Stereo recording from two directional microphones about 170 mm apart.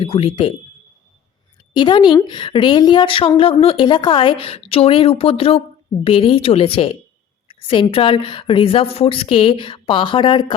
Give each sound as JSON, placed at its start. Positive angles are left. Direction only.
{"t": 0.0, "sound": "a woman's voice", "side_deg": 35}
{"t": 1.7, "sound": "a woman's voice", "side_deg": 30}